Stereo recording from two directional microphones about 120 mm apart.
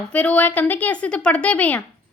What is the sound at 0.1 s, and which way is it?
A woman's voice, 10° left (ahead or behind).